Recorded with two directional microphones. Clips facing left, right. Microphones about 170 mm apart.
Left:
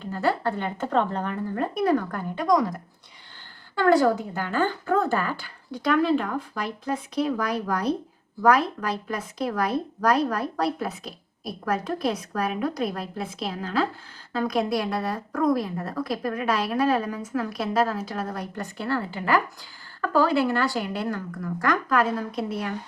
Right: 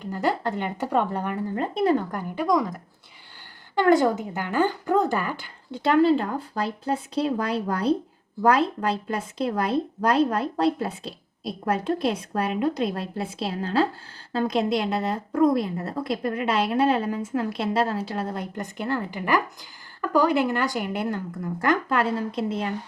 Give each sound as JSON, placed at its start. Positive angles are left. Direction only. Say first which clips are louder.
{"t": 0.0, "sound": "a woman's voice", "louder": "even", "side_deg": -15}
{"t": 1.5, "sound": "a woman's voice", "louder": "right 1 dB", "side_deg": -25}
{"t": 3.8, "sound": "speech", "louder": "even", "side_deg": -20}